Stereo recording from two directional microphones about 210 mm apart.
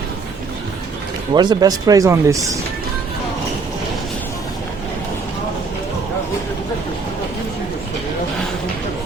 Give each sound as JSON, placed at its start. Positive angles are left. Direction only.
{"t": 1.3, "sound": "speech", "side_deg": -20}